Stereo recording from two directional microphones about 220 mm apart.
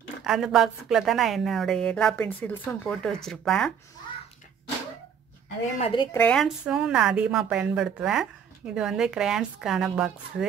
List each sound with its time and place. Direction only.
0.2 s a woman's voice: centre (ahead or behind)
5.8 s a woman's voice: 25° left (ahead or behind)
6.1 s a woman's voice: 5° left (ahead or behind)